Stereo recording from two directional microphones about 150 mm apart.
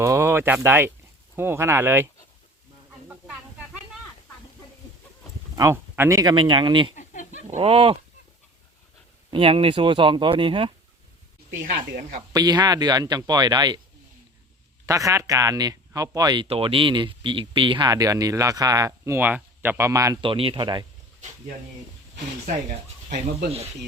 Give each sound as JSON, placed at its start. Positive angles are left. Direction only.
{"t": 0.0, "sound": "speech", "side_deg": -20}
{"t": 5.5, "sound": "speech", "side_deg": -15}
{"t": 6.9, "sound": "chicken", "side_deg": 55}
{"t": 7.4, "sound": "speech", "side_deg": -40}
{"t": 9.3, "sound": "speech", "side_deg": -35}
{"t": 11.6, "sound": "speech", "side_deg": -60}
{"t": 12.3, "sound": "speech", "side_deg": -25}
{"t": 14.8, "sound": "speech", "side_deg": -20}
{"t": 20.2, "sound": "speech", "side_deg": -35}